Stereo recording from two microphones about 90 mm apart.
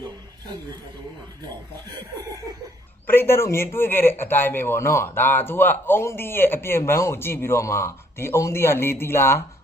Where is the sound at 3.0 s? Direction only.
25° left (ahead or behind).